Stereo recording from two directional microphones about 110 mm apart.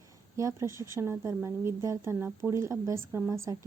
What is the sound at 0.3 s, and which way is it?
A woman's voice, 25° right (ahead or behind).